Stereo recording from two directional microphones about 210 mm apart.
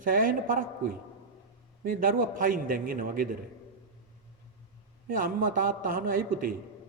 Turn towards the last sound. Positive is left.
turn(degrees=-40)  # may be behind; listen again after turning